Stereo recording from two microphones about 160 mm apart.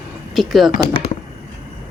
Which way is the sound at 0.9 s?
35° left (ahead or behind).